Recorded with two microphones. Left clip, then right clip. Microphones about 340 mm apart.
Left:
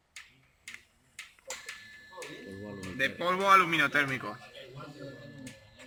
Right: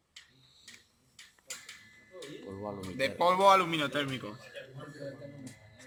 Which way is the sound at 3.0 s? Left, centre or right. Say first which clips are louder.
Right 3 dB; centre.